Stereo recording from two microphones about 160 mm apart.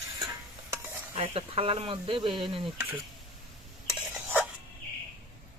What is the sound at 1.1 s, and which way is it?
Speech, 35° right (ahead or behind).